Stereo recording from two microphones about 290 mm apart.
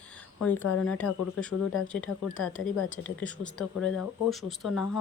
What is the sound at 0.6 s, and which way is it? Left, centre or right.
Speech, left.